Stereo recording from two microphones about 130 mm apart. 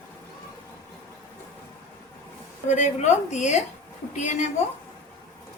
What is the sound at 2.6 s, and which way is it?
A woman's voice, 65° left (ahead or behind).